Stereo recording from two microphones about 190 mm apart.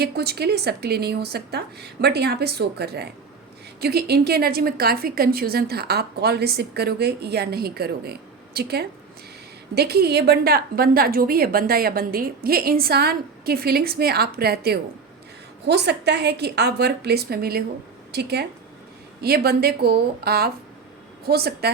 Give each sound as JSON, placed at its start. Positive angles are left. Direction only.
{"t": 0.0, "sound": "a woman's voice", "side_deg": -55}